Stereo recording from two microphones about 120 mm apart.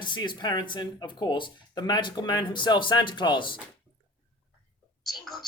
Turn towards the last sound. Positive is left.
turn(degrees=0)  # may be behind; listen again after turning